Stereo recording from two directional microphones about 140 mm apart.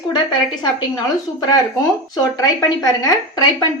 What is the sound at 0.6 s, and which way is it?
A woman's voice, 25° left (ahead or behind).